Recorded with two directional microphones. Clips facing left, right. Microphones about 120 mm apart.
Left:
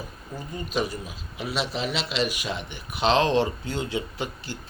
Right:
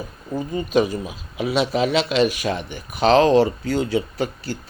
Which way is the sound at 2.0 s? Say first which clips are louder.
Right 8 dB; 45° right (ahead or behind).